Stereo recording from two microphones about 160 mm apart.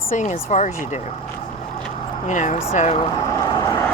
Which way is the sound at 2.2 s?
50° left (ahead or behind).